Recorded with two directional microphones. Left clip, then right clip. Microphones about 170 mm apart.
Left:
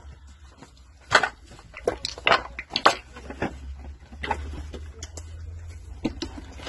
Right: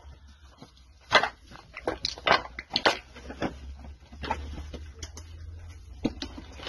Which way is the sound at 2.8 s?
Centre (ahead or behind).